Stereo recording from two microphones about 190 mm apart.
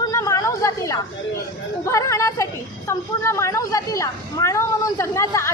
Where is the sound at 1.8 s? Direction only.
15° left (ahead or behind).